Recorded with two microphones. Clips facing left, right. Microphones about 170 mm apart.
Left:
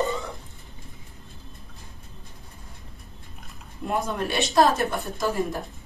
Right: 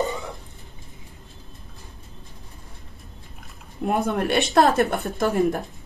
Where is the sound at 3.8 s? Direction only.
60° right (ahead or behind).